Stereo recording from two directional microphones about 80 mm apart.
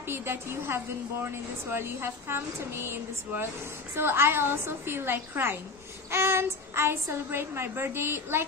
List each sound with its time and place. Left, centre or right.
0.1 s a woman's voice: right